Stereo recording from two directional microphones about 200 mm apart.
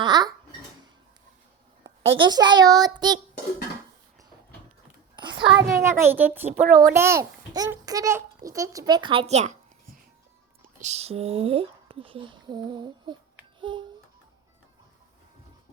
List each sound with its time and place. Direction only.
0.0 s a sound: 20° right (ahead or behind)
1.8 s a child's voice: 25° right (ahead or behind)
5.1 s a sound: 25° right (ahead or behind)
5.8 s a child's voice: 10° right (ahead or behind); by 9.6 s 35° right (ahead or behind)
10.8 s speech: 35° right (ahead or behind)
13.6 s babbling: 25° right (ahead or behind)